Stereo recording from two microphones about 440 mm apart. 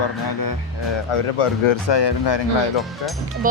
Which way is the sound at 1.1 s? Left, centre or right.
Left.